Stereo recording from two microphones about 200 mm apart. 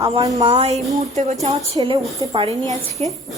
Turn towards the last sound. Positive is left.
turn(degrees=15)  # may be behind; listen again after turning